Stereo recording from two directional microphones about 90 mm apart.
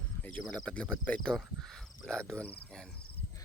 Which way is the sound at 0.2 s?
20° left (ahead or behind).